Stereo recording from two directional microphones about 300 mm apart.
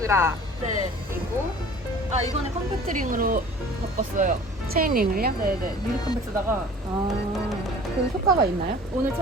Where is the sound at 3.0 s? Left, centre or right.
Right.